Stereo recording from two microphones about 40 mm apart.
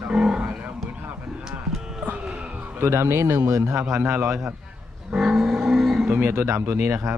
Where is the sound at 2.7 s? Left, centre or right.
Right.